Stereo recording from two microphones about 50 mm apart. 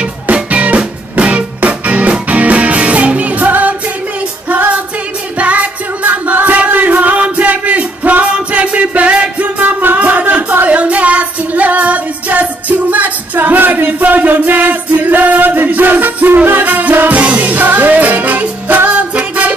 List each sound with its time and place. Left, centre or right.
0.3 s music: right
9.6 s music: right
17.1 s music: right